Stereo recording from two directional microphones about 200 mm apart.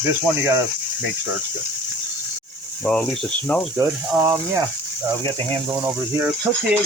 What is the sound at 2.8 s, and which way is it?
Speech, 5° left (ahead or behind).